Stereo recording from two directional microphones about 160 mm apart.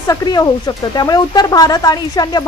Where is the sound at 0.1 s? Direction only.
25° left (ahead or behind).